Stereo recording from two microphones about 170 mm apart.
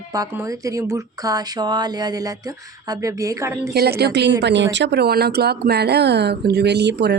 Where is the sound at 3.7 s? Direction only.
70° right (ahead or behind).